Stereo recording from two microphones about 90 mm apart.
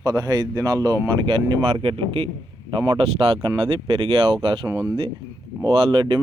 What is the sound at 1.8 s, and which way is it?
A man's voice, 90° right.